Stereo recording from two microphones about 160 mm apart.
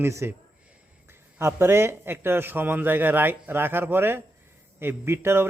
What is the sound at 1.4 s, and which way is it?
A man's voice, 15° right (ahead or behind).